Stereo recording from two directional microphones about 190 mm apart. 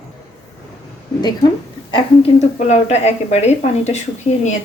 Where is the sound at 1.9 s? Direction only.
35° left (ahead or behind).